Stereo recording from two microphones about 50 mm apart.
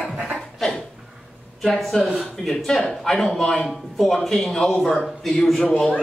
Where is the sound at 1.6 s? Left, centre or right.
Centre.